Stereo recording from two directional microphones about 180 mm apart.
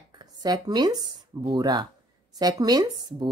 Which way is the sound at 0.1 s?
25° right (ahead or behind).